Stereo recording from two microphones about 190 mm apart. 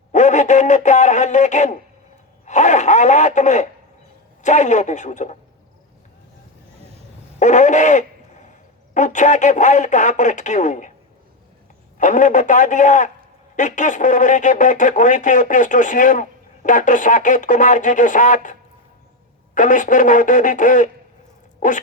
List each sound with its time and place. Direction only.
0.1 s a sound: 40° left (ahead or behind)
2.5 s speech: 40° left (ahead or behind)
7.3 s speech: 40° left (ahead or behind)
11.9 s speech: 40° left (ahead or behind)
19.5 s speech: 40° left (ahead or behind)